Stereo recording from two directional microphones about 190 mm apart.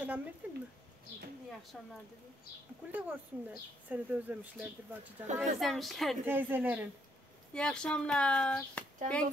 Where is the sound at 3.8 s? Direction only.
10° right (ahead or behind).